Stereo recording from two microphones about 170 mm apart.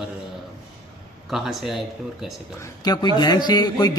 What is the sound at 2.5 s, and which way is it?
Speech, 25° left (ahead or behind).